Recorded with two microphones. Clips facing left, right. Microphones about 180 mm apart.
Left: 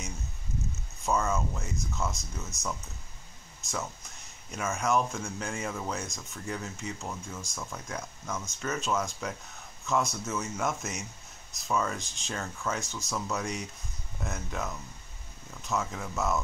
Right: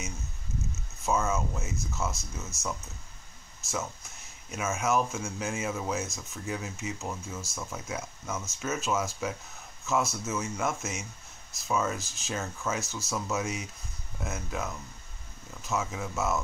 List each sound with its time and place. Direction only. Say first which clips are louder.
1.0 s speech: even; centre (ahead or behind)
3.6 s a sound: right 2 dB; 5° right (ahead or behind)
4.5 s speech: even; 5° right (ahead or behind)